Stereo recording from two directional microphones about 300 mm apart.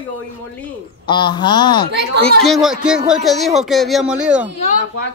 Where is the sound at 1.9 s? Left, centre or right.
Right.